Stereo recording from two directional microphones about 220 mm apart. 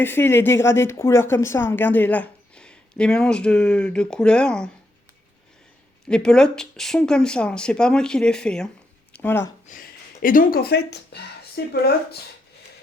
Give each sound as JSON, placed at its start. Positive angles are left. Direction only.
{"t": 0.0, "sound": "a woman's voice", "side_deg": 10}
{"t": 6.1, "sound": "speech", "side_deg": 5}
{"t": 9.6, "sound": "speech", "side_deg": 40}